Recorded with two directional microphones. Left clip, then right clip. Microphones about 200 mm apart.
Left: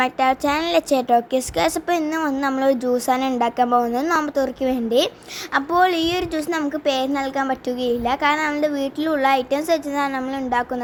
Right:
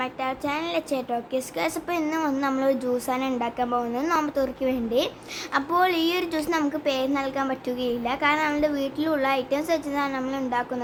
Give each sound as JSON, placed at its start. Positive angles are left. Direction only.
{"t": 0.0, "sound": "a woman's voice", "side_deg": 35}